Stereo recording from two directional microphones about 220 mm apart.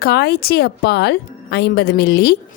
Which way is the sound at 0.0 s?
45° left (ahead or behind).